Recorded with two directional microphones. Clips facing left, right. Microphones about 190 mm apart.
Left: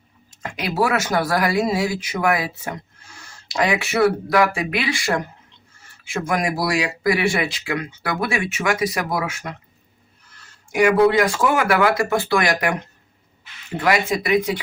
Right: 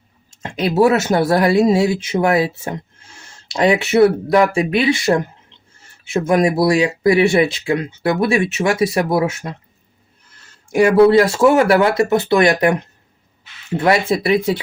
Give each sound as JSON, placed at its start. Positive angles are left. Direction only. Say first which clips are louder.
{"t": 0.3, "sound": "speech", "louder": "right 7 dB", "side_deg": -25}
{"t": 6.2, "sound": "speech", "louder": "right 8 dB", "side_deg": -25}
{"t": 10.8, "sound": "speech", "louder": "right 5 dB", "side_deg": -30}
{"t": 13.8, "sound": "speech", "louder": "right 4 dB", "side_deg": -30}